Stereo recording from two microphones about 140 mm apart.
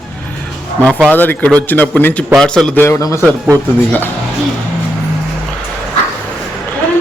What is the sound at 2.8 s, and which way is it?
Speech, 25° left (ahead or behind).